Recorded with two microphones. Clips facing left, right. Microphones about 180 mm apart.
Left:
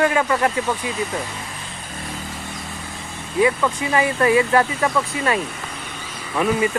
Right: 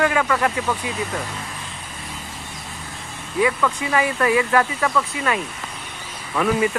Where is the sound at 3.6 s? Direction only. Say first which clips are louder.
Left 1 dB; 25° left (ahead or behind).